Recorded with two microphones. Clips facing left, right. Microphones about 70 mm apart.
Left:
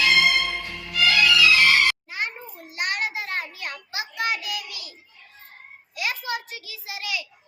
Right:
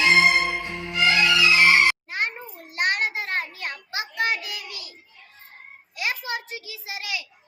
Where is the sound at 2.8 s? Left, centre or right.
Right.